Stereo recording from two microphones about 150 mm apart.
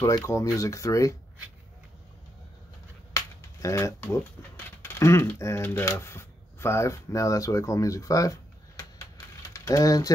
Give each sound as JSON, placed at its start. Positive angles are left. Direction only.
{"t": 0.0, "sound": "speech", "side_deg": 20}
{"t": 3.1, "sound": "speech", "side_deg": 20}